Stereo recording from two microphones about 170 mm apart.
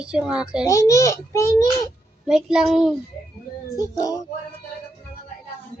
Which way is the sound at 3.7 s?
20° left (ahead or behind).